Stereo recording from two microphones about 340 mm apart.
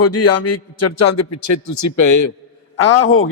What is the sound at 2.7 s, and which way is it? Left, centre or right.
Speech, left.